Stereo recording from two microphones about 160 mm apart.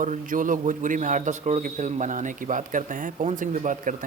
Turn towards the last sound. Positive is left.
turn(degrees=-55)  # may be behind; listen again after turning